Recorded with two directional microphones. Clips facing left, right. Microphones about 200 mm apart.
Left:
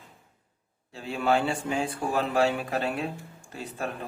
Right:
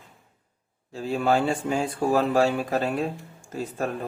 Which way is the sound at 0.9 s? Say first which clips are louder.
Right 3 dB; 40° right (ahead or behind).